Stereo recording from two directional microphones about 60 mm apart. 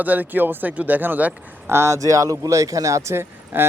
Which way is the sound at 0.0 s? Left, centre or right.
Right.